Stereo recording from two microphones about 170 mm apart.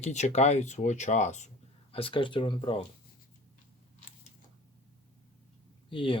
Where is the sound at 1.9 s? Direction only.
35° left (ahead or behind).